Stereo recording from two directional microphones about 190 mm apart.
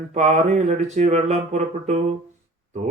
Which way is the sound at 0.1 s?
35° right (ahead or behind).